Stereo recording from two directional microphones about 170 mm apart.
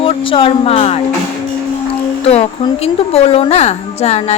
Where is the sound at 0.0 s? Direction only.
30° left (ahead or behind).